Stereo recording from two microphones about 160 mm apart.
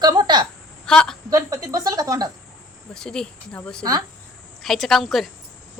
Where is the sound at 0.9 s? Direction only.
5° left (ahead or behind).